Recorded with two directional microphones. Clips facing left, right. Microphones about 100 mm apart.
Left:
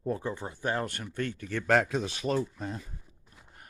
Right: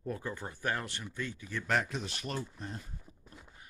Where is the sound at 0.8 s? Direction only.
55° left (ahead or behind); by 1.8 s 80° left.